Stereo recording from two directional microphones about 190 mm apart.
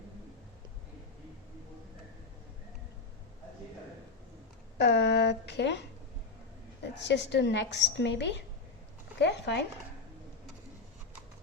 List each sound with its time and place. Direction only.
4.8 s speech: 65° left (ahead or behind)
7.0 s a woman's voice: 65° left (ahead or behind)
9.1 s a sound: 65° left (ahead or behind)